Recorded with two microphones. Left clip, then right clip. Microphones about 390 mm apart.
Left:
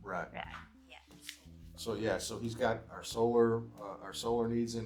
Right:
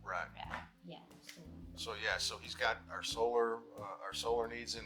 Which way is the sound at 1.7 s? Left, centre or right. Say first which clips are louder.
Left 3 dB; right.